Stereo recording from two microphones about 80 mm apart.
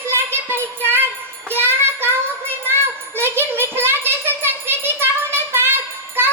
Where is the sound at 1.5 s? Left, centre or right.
Right.